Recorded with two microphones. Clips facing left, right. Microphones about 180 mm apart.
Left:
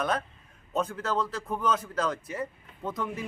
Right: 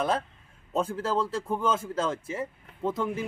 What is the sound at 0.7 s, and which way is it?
Speech, 30° right (ahead or behind).